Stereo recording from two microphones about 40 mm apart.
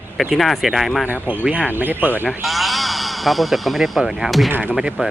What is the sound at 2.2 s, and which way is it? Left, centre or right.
Speech, centre.